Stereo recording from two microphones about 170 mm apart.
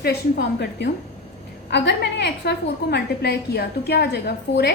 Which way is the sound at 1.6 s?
85° left.